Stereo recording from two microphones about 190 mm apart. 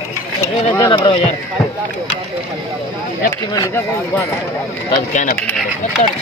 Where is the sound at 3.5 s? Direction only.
20° left (ahead or behind).